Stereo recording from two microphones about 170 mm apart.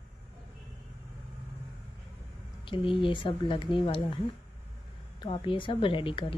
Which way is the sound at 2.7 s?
30° left (ahead or behind).